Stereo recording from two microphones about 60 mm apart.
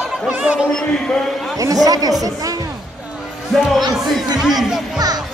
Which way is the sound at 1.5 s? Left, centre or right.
Right.